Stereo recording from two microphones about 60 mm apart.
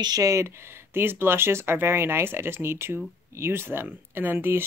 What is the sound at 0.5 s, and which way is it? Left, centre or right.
Speech, right.